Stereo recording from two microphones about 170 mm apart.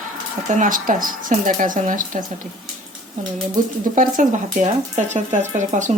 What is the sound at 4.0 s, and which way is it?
Speech, 50° right (ahead or behind).